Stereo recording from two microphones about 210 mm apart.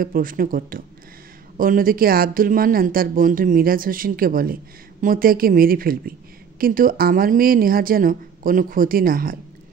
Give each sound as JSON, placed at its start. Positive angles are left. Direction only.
{"t": 0.0, "sound": "speech", "side_deg": -40}